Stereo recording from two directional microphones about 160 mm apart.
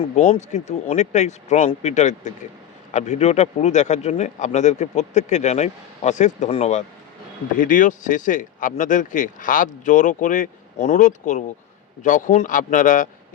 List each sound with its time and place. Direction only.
0.0 s speech: 40° left (ahead or behind)
7.6 s speech: 55° left (ahead or behind)